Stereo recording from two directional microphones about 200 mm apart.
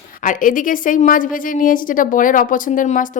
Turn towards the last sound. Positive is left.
turn(degrees=40)  # may be behind; listen again after turning